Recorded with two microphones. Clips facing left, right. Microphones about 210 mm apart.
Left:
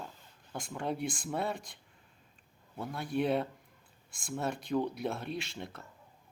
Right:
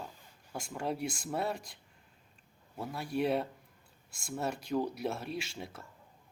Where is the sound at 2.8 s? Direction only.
5° right (ahead or behind).